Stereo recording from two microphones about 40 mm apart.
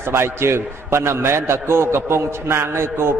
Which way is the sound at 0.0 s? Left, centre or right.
Right.